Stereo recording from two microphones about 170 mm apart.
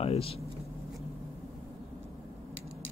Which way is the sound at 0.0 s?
35° left (ahead or behind).